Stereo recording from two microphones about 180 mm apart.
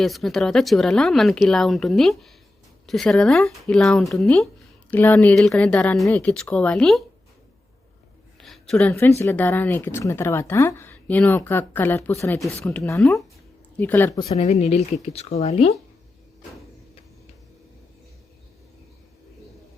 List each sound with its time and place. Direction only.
0.0 s speech: centre (ahead or behind)
8.4 s a sound: centre (ahead or behind)
8.9 s speech: 15° left (ahead or behind)
14.2 s a woman's voice: 35° left (ahead or behind)